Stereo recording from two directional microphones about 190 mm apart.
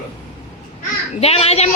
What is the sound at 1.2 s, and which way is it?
Speech, 30° left (ahead or behind).